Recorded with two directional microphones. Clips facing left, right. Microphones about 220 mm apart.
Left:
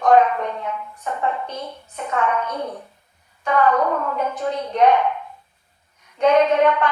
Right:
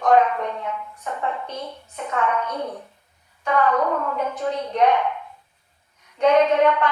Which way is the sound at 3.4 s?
45° left (ahead or behind).